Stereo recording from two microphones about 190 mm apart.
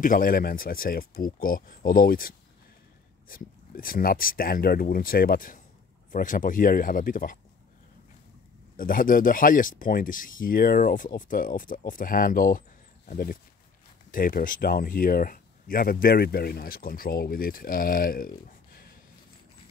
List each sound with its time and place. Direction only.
0.0 s speech: 45° left (ahead or behind)
8.7 s speech: 45° left (ahead or behind)